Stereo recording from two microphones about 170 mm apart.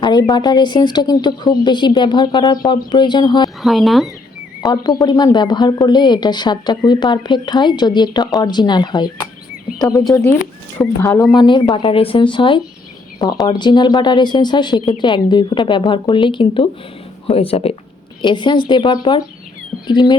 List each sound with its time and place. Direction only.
0.0 s a woman's voice: 25° left (ahead or behind)
3.6 s speech: centre (ahead or behind)
4.6 s a woman's voice: 25° left (ahead or behind)
11.3 s a woman's voice: 25° left (ahead or behind)